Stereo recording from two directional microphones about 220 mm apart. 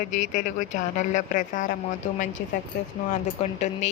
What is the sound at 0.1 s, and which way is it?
Speech, 35° left (ahead or behind).